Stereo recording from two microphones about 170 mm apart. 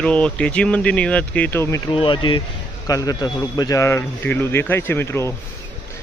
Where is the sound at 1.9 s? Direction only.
30° left (ahead or behind).